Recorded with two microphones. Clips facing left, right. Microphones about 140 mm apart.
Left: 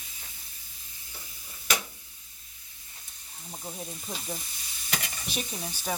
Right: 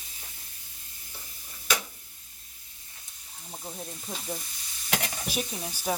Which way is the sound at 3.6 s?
Centre (ahead or behind).